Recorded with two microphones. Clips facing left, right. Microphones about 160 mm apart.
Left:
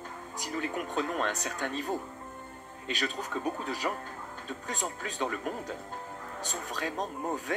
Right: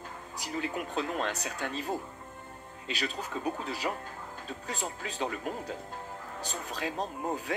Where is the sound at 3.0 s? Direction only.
45° left (ahead or behind).